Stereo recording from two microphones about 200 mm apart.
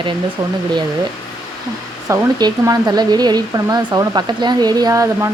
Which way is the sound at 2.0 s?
20° right (ahead or behind).